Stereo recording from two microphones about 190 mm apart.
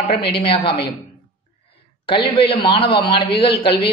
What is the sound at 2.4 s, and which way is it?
A man's voice, 30° left (ahead or behind).